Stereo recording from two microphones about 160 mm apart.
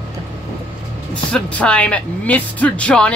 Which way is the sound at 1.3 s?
10° left (ahead or behind).